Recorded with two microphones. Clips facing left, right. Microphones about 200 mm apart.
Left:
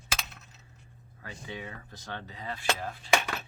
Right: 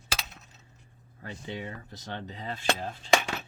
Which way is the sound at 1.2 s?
25° right (ahead or behind).